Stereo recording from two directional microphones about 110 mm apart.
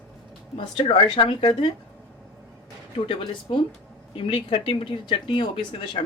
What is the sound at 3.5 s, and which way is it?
Speech, 45° left (ahead or behind).